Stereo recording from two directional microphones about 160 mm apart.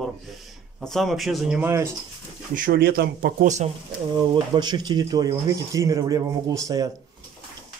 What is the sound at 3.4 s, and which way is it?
Speech, 45° right (ahead or behind).